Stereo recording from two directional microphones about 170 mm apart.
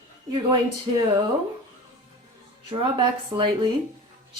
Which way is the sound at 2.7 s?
30° right (ahead or behind).